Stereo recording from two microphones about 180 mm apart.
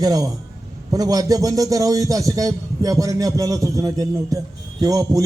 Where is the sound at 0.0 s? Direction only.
20° right (ahead or behind).